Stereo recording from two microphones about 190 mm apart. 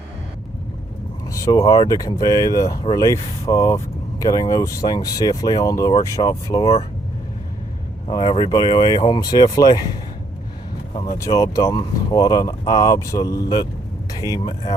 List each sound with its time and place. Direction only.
1.3 s speech: 15° left (ahead or behind)
8.0 s speech: 25° left (ahead or behind)
11.2 s speech: 20° left (ahead or behind)